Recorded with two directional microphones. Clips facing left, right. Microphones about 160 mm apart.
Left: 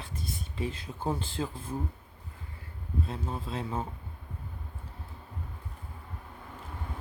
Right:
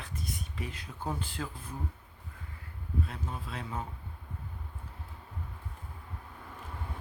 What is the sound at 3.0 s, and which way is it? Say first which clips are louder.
Speech: left 4 dB; 30° left (ahead or behind).